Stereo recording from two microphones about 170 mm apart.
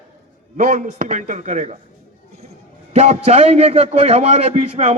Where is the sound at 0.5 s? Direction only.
50° right (ahead or behind).